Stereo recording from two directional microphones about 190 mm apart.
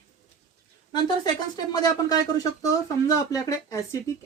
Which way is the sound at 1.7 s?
20° left (ahead or behind).